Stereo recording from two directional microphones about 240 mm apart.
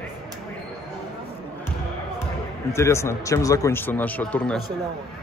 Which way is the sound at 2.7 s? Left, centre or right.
Centre.